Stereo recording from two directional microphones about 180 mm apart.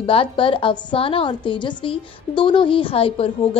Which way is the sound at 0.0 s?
30° left (ahead or behind).